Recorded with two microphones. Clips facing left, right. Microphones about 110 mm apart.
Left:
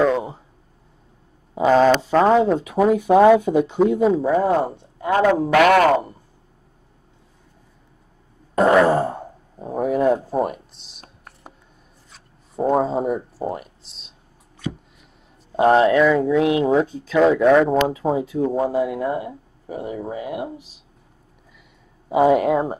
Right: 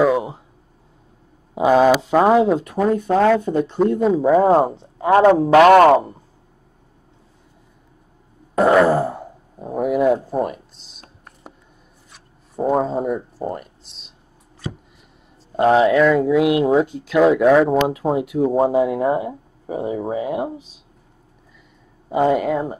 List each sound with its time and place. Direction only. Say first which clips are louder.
0.0 s a sound: right 2 dB; 10° right (ahead or behind)
1.5 s speech: right 1 dB; 10° right (ahead or behind)
5.0 s a man's voice: right 5 dB; 25° right (ahead or behind)
8.5 s speech: right 1 dB; centre (ahead or behind)
12.5 s speech: even; centre (ahead or behind)
15.5 s a man's voice: even; centre (ahead or behind); by 20.4 s 25° right (ahead or behind)
22.1 s speech: left 2 dB; 5° left (ahead or behind)
22.4 s speech: left 2 dB; 20° left (ahead or behind)